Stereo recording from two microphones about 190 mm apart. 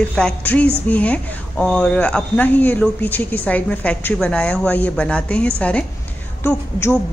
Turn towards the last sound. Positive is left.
turn(degrees=10)  # may be behind; listen again after turning